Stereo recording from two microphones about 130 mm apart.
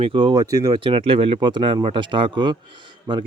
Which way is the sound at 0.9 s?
40° right (ahead or behind).